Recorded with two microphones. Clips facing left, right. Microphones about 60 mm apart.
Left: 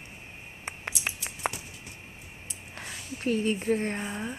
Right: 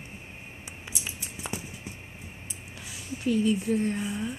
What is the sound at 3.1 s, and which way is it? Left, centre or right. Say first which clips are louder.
Speech: right 2 dB; left.